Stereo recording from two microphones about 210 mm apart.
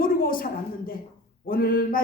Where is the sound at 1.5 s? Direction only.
45° left (ahead or behind).